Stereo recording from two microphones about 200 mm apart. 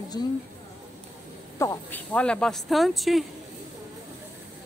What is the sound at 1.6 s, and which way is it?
Speech, 10° left (ahead or behind).